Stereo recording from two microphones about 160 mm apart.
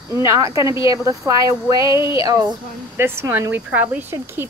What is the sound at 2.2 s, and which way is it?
Speech, 20° right (ahead or behind).